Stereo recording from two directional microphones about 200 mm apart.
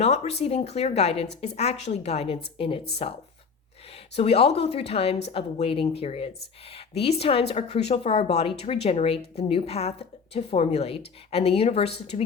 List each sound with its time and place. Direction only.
0.0 s speech: 35° left (ahead or behind)
3.9 s speech: 30° left (ahead or behind)